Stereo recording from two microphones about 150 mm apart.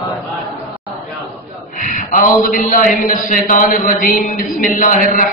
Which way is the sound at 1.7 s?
60° left (ahead or behind).